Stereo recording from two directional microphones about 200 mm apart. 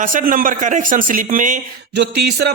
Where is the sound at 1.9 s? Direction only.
60° right (ahead or behind).